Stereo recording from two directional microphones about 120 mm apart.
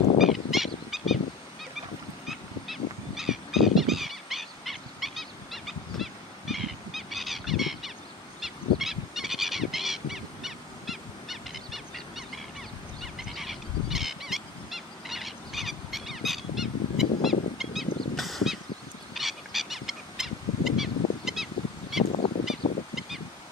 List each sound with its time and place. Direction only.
0.2 s fowl: centre (ahead or behind)
2.2 s goose: centre (ahead or behind)
22.6 s goose: 55° left (ahead or behind)
22.9 s goose: 5° right (ahead or behind)